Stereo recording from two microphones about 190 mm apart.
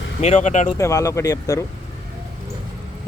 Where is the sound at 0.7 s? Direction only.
15° left (ahead or behind).